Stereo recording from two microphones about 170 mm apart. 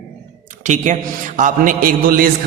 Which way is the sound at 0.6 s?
45° right (ahead or behind).